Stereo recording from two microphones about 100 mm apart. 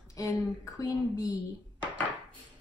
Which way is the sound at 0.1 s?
35° left (ahead or behind).